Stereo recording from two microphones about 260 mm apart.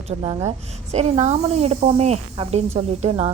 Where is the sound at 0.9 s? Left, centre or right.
Right.